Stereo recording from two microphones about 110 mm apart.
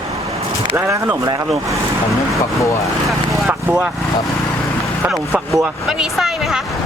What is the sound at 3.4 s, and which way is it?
Speech, 10° right (ahead or behind).